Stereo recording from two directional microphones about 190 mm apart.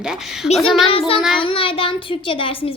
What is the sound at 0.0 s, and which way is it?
Speech, 5° right (ahead or behind).